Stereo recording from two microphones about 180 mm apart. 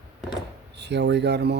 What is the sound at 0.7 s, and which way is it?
Speech, 70° right (ahead or behind).